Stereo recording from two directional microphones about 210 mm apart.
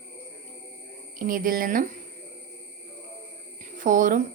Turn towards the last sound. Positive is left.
turn(degrees=-40)  # may be behind; listen again after turning